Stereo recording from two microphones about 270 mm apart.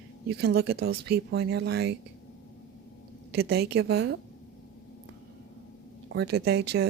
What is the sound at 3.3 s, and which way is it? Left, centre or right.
Speech, right.